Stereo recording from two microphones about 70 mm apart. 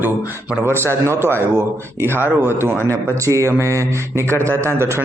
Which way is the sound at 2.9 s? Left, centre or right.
Right.